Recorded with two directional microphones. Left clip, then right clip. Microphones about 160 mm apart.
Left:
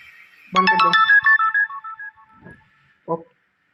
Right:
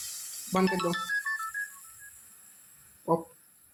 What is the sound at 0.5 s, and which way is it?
Ringtone, 45° left (ahead or behind).